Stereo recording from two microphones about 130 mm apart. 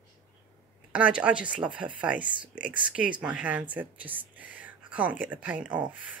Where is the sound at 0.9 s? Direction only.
10° right (ahead or behind).